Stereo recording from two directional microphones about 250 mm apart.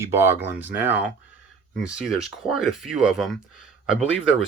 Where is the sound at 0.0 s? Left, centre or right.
Centre.